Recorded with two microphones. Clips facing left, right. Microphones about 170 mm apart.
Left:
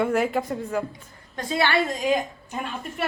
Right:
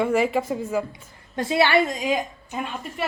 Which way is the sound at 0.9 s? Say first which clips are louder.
Even; 25° right (ahead or behind).